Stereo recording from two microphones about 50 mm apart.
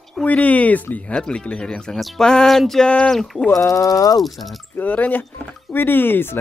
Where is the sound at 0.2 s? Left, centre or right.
Left.